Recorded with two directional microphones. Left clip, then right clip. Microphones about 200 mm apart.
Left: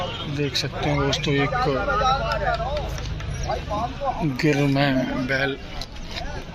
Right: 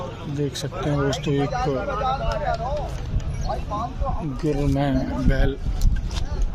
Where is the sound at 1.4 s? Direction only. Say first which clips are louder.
Left 2 dB; 40° left (ahead or behind).